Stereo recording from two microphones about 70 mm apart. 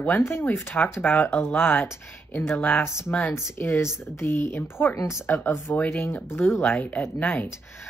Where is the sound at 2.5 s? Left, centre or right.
Centre.